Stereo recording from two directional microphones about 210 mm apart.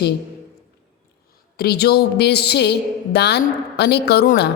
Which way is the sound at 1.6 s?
50° left (ahead or behind).